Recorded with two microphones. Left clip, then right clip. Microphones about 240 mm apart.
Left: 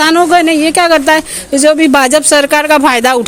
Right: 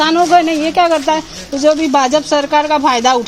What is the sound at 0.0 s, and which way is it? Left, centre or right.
Speech, left.